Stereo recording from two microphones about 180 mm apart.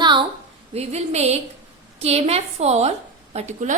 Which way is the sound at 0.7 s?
35° right (ahead or behind).